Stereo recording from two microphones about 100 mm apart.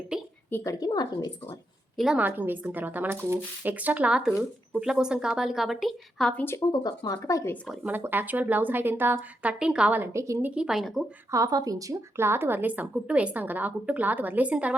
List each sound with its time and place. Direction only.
0.6 s speech: 40° left (ahead or behind)
2.1 s a woman's voice: 15° right (ahead or behind); by 6.3 s centre (ahead or behind)
6.3 s speech: 20° left (ahead or behind)
6.7 s speech: 45° left (ahead or behind)
7.9 s a woman's voice: 20° right (ahead or behind)
10.1 s a woman's voice: 30° right (ahead or behind)
10.4 s speech: 10° right (ahead or behind)
11.3 s speech: 35° right (ahead or behind)
12.1 s a woman's voice: 25° right (ahead or behind)